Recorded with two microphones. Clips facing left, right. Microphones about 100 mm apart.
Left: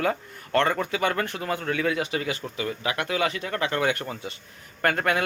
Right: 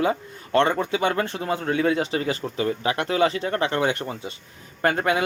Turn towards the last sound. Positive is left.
turn(degrees=-20)  # may be behind; listen again after turning